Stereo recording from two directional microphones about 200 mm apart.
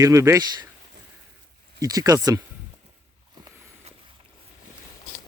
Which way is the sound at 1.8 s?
20° right (ahead or behind).